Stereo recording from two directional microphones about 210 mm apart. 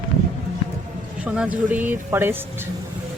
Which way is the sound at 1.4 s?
10° right (ahead or behind).